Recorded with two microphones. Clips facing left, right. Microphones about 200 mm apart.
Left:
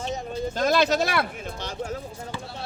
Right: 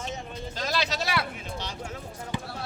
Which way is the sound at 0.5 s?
50° left (ahead or behind).